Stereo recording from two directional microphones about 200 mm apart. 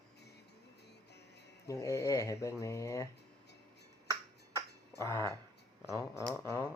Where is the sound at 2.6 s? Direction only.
15° left (ahead or behind).